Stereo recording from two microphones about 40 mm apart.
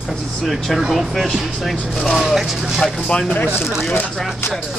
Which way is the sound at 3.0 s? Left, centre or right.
Left.